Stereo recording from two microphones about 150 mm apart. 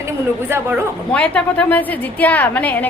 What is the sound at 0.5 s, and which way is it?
Speech, 15° right (ahead or behind).